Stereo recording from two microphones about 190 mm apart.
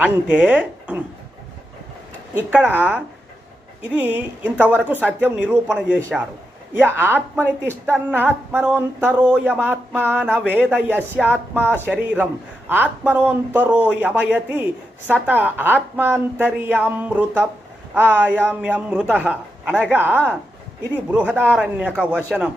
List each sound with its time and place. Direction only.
0.0 s speech: 5° right (ahead or behind)
2.5 s a man's voice: 10° right (ahead or behind)